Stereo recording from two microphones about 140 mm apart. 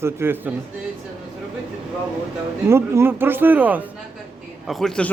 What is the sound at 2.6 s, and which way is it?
Speech, 20° right (ahead or behind).